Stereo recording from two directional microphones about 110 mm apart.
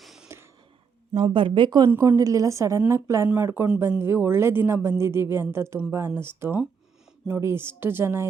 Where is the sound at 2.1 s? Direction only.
30° right (ahead or behind).